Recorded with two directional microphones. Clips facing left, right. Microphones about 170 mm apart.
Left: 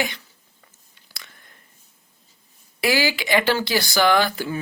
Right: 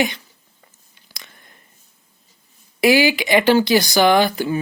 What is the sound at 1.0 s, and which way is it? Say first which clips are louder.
Whispering: right 2 dB; 20° right (ahead or behind).